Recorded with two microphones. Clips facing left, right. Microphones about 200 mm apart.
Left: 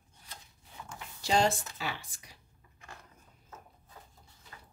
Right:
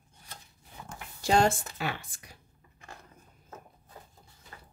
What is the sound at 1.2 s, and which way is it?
A woman's voice, 50° right (ahead or behind).